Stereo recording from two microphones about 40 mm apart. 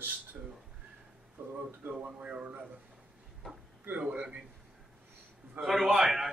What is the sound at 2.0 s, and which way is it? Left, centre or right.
Speech, right.